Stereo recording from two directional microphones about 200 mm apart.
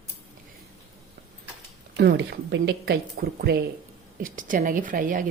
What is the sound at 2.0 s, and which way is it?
A woman's voice, 55° right (ahead or behind).